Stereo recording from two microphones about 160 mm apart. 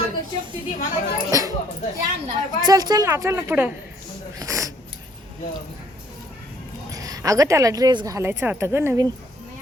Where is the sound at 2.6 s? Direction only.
25° right (ahead or behind).